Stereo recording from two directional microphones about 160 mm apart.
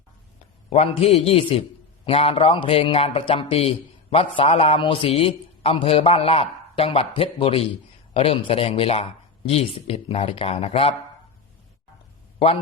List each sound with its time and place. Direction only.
0.7 s a man's voice: 40° left (ahead or behind)